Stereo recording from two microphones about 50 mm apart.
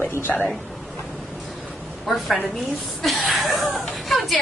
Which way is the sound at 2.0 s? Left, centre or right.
Centre.